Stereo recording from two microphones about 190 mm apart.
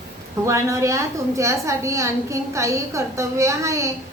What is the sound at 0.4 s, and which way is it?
A woman's voice, 15° right (ahead or behind).